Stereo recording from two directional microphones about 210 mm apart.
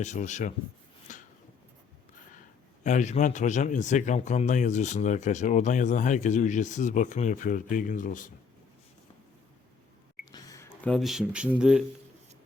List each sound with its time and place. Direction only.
0.0 s speech: 35° left (ahead or behind)
1.1 s a sound: 35° left (ahead or behind)
2.8 s speech: 35° left (ahead or behind)
10.3 s speech: 15° left (ahead or behind); by 11.8 s 5° right (ahead or behind)